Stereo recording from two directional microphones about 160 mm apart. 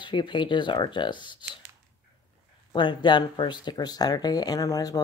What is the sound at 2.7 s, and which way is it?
Speech, 30° left (ahead or behind).